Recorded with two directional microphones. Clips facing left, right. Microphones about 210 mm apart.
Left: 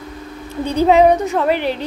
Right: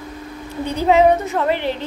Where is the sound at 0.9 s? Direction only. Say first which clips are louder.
Left 1 dB; 15° left (ahead or behind).